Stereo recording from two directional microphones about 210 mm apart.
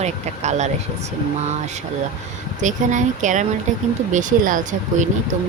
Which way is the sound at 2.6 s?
35° right (ahead or behind).